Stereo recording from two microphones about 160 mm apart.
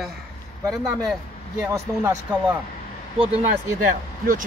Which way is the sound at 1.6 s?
20° right (ahead or behind).